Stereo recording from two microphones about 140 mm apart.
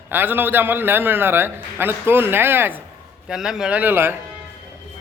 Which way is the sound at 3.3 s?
5° right (ahead or behind).